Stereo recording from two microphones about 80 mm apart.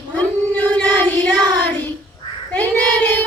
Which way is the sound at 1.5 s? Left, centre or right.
Left.